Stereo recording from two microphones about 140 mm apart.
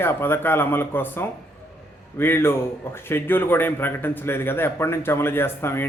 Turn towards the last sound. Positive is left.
turn(degrees=15)  # may be behind; listen again after turning